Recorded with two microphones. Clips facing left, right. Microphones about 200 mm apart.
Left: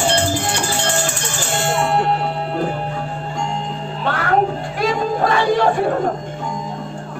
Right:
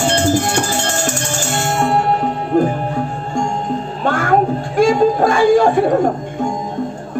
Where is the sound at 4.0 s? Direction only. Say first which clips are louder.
Right 2 dB; 45° right (ahead or behind).